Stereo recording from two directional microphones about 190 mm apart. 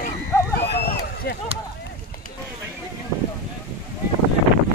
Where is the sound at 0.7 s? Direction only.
55° left (ahead or behind).